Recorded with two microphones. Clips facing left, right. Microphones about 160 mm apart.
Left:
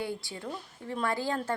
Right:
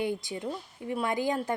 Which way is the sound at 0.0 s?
20° right (ahead or behind).